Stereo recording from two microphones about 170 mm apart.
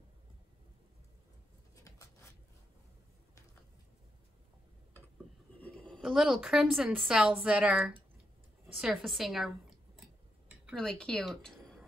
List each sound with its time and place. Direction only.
1.8 s writing: 20° left (ahead or behind)
5.6 s speech: 5° left (ahead or behind)